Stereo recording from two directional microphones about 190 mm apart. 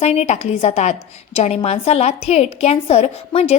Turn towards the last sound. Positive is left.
turn(degrees=30)  # may be behind; listen again after turning